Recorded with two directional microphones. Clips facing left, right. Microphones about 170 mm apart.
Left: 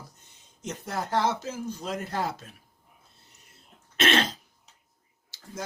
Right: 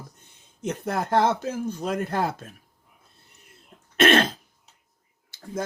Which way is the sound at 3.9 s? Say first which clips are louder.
Right 6 dB; 55° right (ahead or behind).